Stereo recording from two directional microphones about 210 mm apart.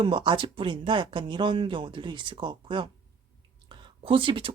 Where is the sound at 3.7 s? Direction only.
25° right (ahead or behind).